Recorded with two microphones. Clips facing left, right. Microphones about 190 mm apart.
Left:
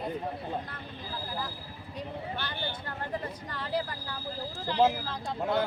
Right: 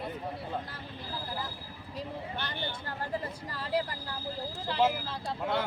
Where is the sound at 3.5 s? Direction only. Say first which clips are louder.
Left 1 dB; 35° right (ahead or behind).